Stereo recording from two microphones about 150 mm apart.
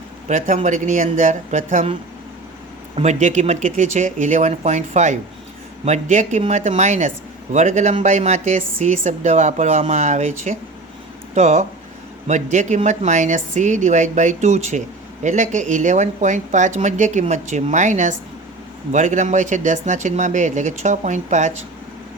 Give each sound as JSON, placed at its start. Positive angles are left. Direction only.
{"t": 0.3, "sound": "speech", "side_deg": -55}
{"t": 2.9, "sound": "a woman's voice", "side_deg": -50}